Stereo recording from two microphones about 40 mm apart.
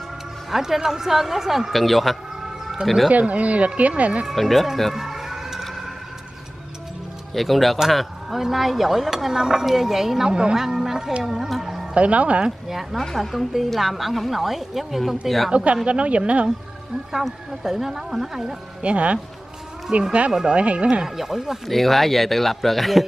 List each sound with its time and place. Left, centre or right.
0.5 s a woman's voice: centre
3.1 s speech: right
4.3 s speech: centre
4.9 s emergency vehicle: centre
7.3 s a woman's voice: centre
11.2 s speech: centre
11.9 s speech: right
12.4 s a woman's voice: centre
13.0 s speech: centre
15.5 s speech: right
17.1 s a woman's voice: centre
18.8 s speech: right
21.0 s a woman's voice: centre
21.6 s speech: centre